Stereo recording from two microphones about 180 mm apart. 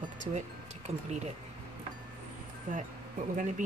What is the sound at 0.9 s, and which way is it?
Speech, 40° right (ahead or behind).